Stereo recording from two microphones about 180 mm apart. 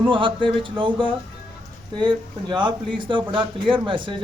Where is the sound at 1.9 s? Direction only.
25° right (ahead or behind).